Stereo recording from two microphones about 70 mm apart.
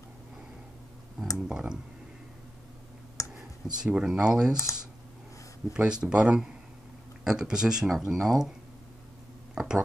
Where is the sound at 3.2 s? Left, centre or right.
Left.